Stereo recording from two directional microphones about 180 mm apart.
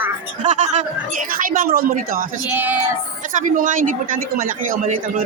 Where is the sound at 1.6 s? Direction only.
55° right (ahead or behind).